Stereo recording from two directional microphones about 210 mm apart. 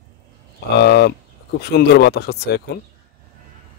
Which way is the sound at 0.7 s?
50° left (ahead or behind).